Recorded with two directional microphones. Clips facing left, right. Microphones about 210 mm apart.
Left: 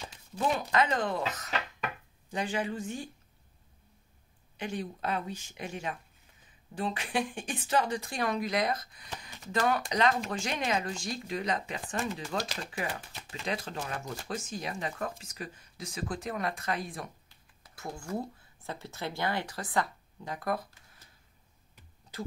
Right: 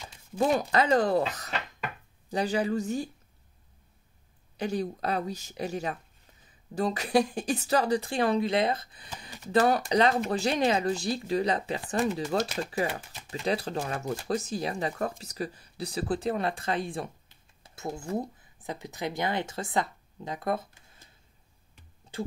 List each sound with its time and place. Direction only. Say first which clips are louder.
0.4 s speech: right 4 dB; 40° right (ahead or behind)
4.6 s speech: right 6 dB; 35° right (ahead or behind)